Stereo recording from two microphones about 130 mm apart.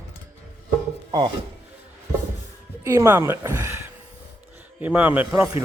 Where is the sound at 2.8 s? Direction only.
20° right (ahead or behind).